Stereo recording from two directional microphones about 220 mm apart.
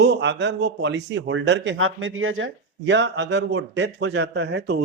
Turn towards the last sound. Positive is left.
turn(degrees=-50)  # may be behind; listen again after turning